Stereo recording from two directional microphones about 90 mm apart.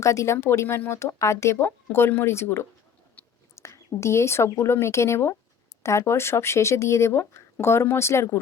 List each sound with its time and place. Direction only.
0.0 s speech: 35° left (ahead or behind)
3.2 s whispering: 20° left (ahead or behind)
3.6 s speech: 35° left (ahead or behind)